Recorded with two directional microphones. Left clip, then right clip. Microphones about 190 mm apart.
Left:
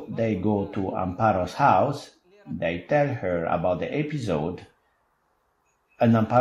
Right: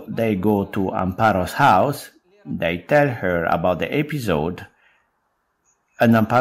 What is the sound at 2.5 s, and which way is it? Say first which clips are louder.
Speech: right 6 dB; 40° right (ahead or behind).